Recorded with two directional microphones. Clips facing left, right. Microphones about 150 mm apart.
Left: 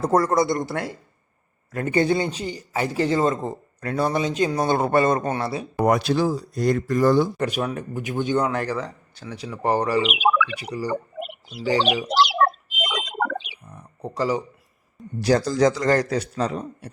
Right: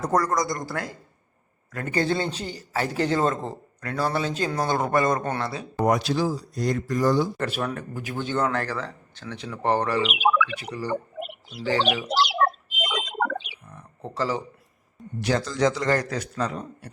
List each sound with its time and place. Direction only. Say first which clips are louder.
0.0 s speech: left 4 dB; 30° left (ahead or behind); by 3.6 s 5° left (ahead or behind)
3.8 s speech: left 3 dB; 25° left (ahead or behind)
5.8 s speech: left 3 dB; 60° left (ahead or behind)
7.3 s speech: left 3 dB; 15° left (ahead or behind)
12.0 s bird: left 3 dB; 90° left
13.7 s a sound: left 3 dB; 15° left (ahead or behind)
15.2 s a man's voice: left 5 dB; 35° left (ahead or behind)
16.0 s speech: left 4 dB; 25° left (ahead or behind)